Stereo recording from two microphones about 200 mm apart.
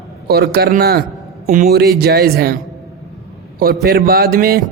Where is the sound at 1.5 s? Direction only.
35° right (ahead or behind).